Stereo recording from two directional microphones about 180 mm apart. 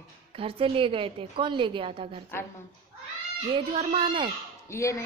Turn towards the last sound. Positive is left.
turn(degrees=15)  # may be behind; listen again after turning